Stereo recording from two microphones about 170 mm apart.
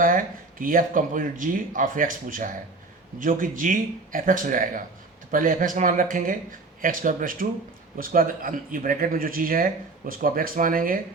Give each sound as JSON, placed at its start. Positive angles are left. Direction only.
{"t": 0.0, "sound": "speech", "side_deg": -55}